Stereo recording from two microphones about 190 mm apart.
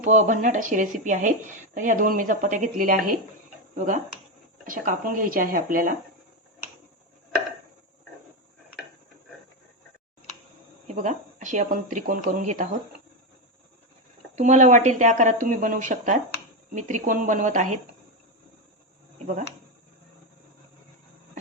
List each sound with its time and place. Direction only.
0.0 s speech: 40° right (ahead or behind)
10.8 s speech: 40° right (ahead or behind)
14.3 s speech: 40° right (ahead or behind)